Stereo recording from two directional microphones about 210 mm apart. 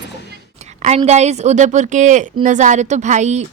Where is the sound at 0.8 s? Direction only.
30° right (ahead or behind).